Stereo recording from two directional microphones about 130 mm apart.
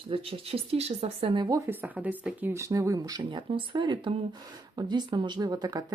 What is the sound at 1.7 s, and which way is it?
Speech, 10° right (ahead or behind).